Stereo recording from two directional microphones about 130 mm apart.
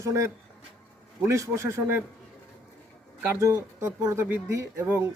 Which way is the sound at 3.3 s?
20° right (ahead or behind).